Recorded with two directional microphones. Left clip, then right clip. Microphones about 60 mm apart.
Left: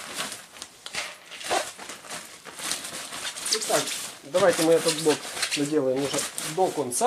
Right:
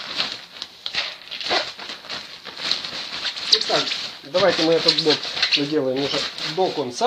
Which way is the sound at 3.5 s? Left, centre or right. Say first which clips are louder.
Right 6 dB; left.